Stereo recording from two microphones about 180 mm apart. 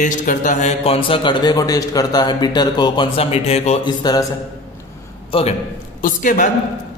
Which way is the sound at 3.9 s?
20° left (ahead or behind).